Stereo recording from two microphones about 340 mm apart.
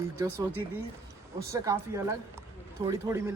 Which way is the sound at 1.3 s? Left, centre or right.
Centre.